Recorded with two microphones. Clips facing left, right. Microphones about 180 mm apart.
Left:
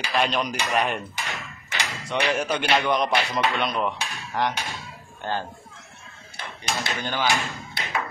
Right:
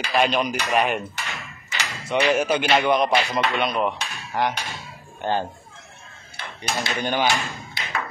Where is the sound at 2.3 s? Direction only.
5° right (ahead or behind).